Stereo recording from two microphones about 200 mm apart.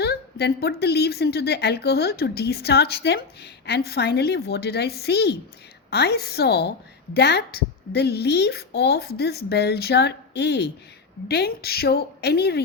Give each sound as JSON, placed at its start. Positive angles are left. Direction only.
{"t": 0.0, "sound": "a woman's voice", "side_deg": 55}